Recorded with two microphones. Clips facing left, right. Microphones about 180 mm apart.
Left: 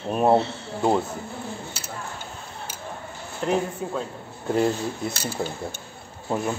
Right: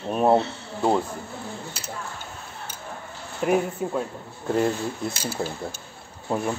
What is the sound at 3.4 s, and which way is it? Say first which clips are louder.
A man's voice: right 2 dB; 10° right (ahead or behind).